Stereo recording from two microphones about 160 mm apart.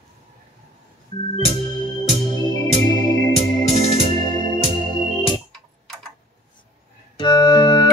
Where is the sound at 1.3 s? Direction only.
35° left (ahead or behind).